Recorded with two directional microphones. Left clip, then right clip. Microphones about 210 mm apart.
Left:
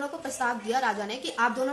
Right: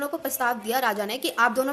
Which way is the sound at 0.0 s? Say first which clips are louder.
Right 4 dB; 50° right (ahead or behind).